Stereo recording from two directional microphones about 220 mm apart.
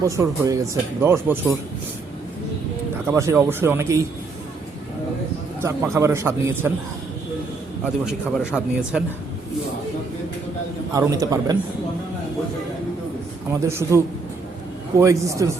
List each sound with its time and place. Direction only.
0.0 s speech: 15° right (ahead or behind)
3.1 s speech: 10° right (ahead or behind)
5.6 s speech: 10° right (ahead or behind)
8.4 s speech: 5° right (ahead or behind)
10.9 s speech: 15° right (ahead or behind)
13.5 s speech: 10° right (ahead or behind)